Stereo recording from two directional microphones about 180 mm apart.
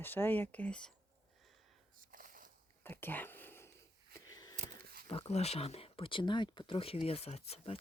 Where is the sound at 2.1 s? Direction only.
50° right (ahead or behind).